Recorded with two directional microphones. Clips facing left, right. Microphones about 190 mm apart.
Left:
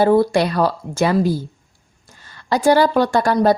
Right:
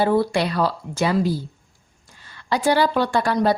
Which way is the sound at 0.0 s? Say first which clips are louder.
Left 5 dB; 45° left (ahead or behind).